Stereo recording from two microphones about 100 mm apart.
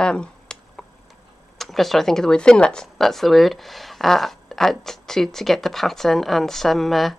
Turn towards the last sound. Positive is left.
turn(degrees=0)  # may be behind; listen again after turning